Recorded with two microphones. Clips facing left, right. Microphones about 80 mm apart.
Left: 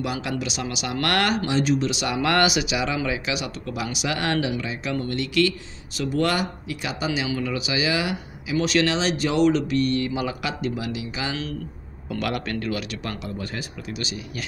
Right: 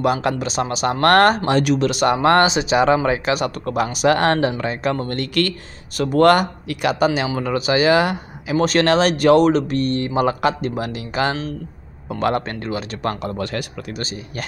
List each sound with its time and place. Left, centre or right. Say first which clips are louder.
0.0 s speech: right 8 dB; right
1.6 s speech: right 4 dB; right
2.0 s speech: right 7 dB; right
7.2 s speech: right 6 dB; right
12.1 s speech: right 6 dB; right
13.0 s speech: right 8 dB; right
13.4 s speech: right 7 dB; right
13.9 s speech: right 2 dB; right